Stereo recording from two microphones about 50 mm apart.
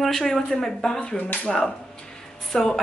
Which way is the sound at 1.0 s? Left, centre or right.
Left.